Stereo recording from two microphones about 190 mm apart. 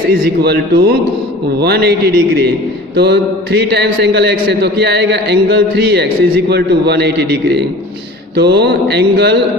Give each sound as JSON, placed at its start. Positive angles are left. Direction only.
{"t": 0.1, "sound": "a man's voice", "side_deg": -55}
{"t": 2.9, "sound": "a sound", "side_deg": -60}
{"t": 3.7, "sound": "a man's voice", "side_deg": -60}